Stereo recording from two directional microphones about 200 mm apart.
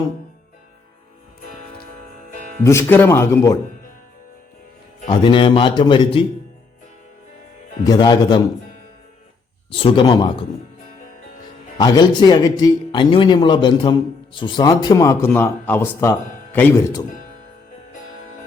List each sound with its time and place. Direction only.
2.6 s speech: 15° left (ahead or behind)
5.0 s a man's voice: 25° left (ahead or behind)
7.9 s a man's voice: 20° left (ahead or behind)
9.6 s a man's voice: 25° left (ahead or behind)
11.8 s a man's voice: 20° left (ahead or behind)